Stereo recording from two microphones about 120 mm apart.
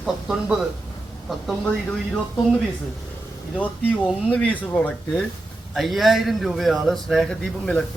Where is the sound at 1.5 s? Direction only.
5° left (ahead or behind).